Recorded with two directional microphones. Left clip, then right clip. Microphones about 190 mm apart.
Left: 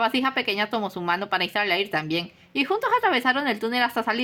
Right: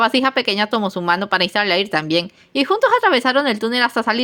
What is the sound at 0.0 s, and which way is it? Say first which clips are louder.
Speech: right 7 dB; 30° right (ahead or behind).